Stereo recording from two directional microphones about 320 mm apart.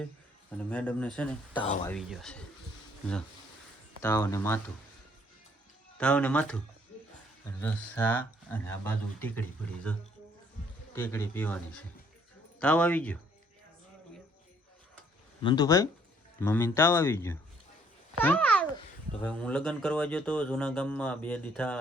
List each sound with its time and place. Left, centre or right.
0.5 s speech: centre
1.6 s speech: centre
1.9 s speech: centre
4.0 s speech: centre
6.0 s speech: centre
7.6 s speech: centre
10.9 s speech: centre
15.4 s a child's voice: centre